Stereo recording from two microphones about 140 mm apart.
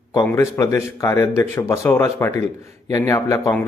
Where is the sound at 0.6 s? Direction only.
20° left (ahead or behind).